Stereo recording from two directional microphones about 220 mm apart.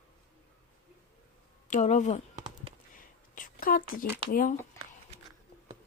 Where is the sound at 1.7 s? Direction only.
35° left (ahead or behind).